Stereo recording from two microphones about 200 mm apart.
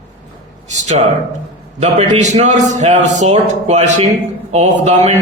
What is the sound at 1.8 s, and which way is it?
A man's voice, 35° right (ahead or behind).